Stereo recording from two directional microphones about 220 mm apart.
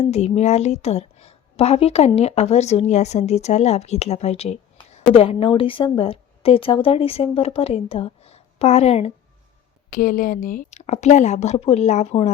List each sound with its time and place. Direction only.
0.0 s a woman's voice: 30° left (ahead or behind)